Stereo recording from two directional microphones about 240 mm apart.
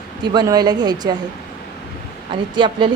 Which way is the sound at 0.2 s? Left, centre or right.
Centre.